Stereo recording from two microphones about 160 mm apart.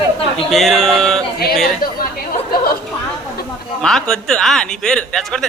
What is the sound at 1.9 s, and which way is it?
Speech, 65° left (ahead or behind).